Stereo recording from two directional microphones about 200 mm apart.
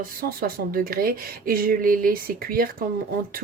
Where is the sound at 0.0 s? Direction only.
45° right (ahead or behind).